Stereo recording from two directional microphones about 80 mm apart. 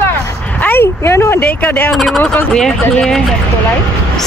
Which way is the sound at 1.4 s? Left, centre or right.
Left.